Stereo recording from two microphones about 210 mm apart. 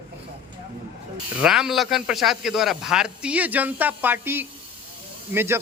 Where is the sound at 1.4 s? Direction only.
Centre (ahead or behind).